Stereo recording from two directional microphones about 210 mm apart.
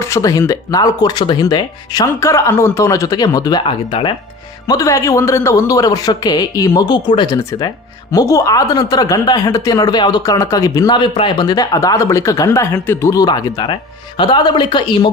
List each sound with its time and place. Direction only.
0.0 s speech: 15° left (ahead or behind)